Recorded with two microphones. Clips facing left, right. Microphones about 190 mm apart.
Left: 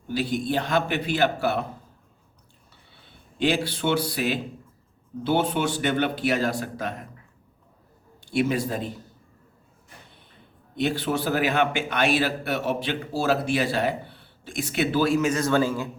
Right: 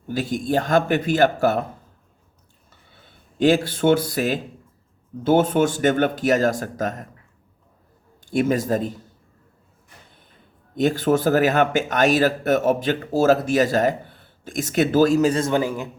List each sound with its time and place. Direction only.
0.1 s speech: 45° right (ahead or behind)
2.9 s speech: 45° right (ahead or behind)
8.2 s speech: 45° right (ahead or behind)
10.8 s speech: 45° right (ahead or behind); by 15.9 s 15° right (ahead or behind)